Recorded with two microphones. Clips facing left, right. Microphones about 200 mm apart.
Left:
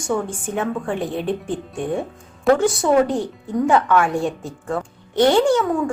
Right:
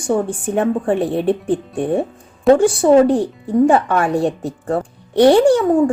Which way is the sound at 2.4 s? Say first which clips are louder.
Right 5 dB; 30° right (ahead or behind).